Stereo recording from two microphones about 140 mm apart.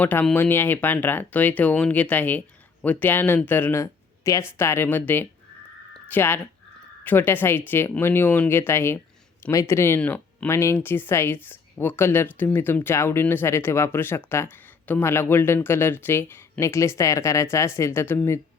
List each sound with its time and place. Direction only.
0.0 s speech: 10° left (ahead or behind)
5.9 s a sound: 15° left (ahead or behind)
7.0 s speech: 15° left (ahead or behind)